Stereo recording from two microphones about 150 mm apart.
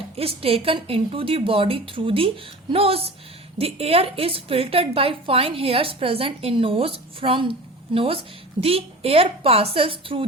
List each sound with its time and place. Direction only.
0.2 s a woman's voice: 40° right (ahead or behind)